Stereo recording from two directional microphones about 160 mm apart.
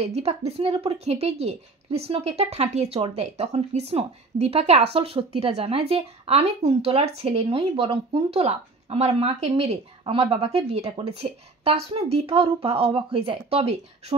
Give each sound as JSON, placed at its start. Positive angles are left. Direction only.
{"t": 0.0, "sound": "speech", "side_deg": -40}